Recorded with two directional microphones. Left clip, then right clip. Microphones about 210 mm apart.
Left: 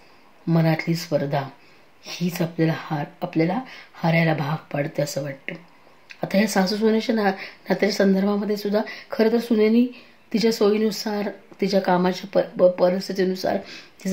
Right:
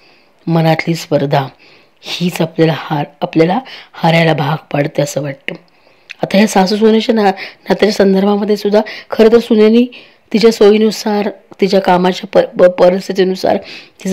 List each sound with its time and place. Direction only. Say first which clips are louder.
0.5 s speech: right 10 dB; 40° right (ahead or behind)